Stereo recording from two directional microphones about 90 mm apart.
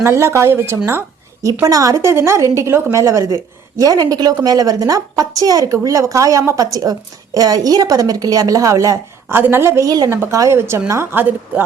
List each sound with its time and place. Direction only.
0.0 s a woman's voice: 30° right (ahead or behind)
0.9 s a sound: 30° right (ahead or behind)
1.6 s a woman's voice: 40° right (ahead or behind)
2.0 s a woman's voice: 30° right (ahead or behind)